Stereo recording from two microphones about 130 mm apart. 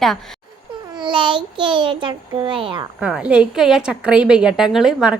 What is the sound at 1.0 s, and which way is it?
A child's voice, 35° right (ahead or behind).